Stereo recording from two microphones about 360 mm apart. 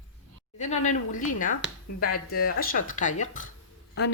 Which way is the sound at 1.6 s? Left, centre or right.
Centre.